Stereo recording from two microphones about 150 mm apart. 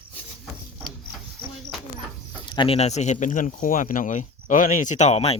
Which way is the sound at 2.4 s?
35° left (ahead or behind).